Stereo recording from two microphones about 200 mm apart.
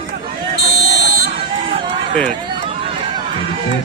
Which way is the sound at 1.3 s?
30° right (ahead or behind).